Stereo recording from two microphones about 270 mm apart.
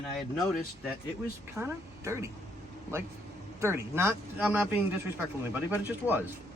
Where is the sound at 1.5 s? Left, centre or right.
Centre.